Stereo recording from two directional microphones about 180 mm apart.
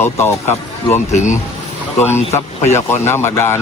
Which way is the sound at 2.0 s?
15° left (ahead or behind).